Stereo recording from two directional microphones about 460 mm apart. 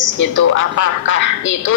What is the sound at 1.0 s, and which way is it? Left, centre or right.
Speech, left.